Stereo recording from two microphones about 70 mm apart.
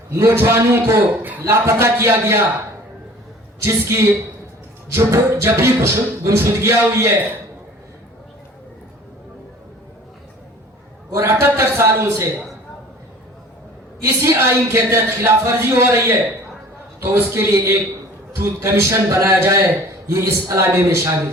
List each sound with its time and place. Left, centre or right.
0.2 s music: right
3.6 s a man's voice: right
4.9 s music: right
11.1 s a man's voice: right
14.0 s music: right
18.3 s a man's voice: right